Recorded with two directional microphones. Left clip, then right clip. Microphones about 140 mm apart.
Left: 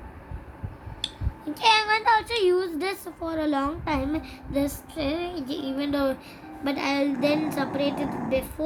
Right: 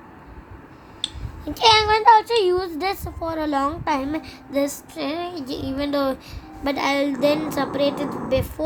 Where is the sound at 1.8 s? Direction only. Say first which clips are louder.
Right 7 dB; 40° right (ahead or behind).